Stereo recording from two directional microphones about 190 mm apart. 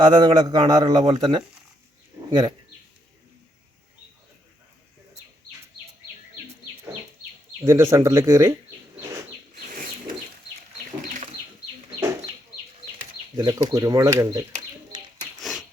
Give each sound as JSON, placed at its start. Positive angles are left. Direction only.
{"t": 0.0, "sound": "a man's voice", "side_deg": -20}
{"t": 2.1, "sound": "a sound", "side_deg": -10}
{"t": 7.6, "sound": "speech", "side_deg": -15}
{"t": 11.0, "sound": "bird", "side_deg": -40}
{"t": 13.3, "sound": "a man's voice", "side_deg": -20}
{"t": 15.4, "sound": "a sound", "side_deg": 0}